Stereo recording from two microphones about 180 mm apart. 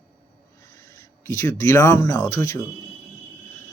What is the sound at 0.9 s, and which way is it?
Speech, 15° left (ahead or behind).